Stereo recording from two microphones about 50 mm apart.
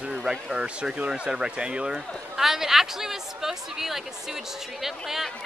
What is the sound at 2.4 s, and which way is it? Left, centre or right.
A woman's voice, centre.